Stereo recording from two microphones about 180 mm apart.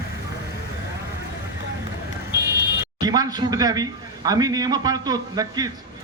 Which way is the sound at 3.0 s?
20° right (ahead or behind).